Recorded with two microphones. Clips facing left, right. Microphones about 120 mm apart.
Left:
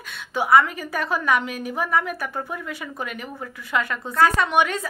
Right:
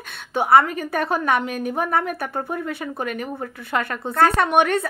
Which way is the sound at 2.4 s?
35° right (ahead or behind).